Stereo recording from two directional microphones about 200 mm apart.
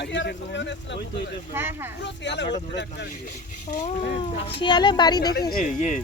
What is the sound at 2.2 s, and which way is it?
Speech, 60° left (ahead or behind).